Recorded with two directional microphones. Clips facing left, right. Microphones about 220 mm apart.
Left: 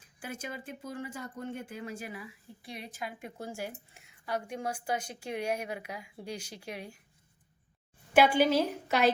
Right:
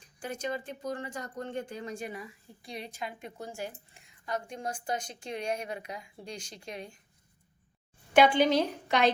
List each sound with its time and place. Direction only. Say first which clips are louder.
0.0 s a woman's voice: right 5 dB; 5° left (ahead or behind)
8.1 s a woman's voice: right 1 dB; 5° left (ahead or behind)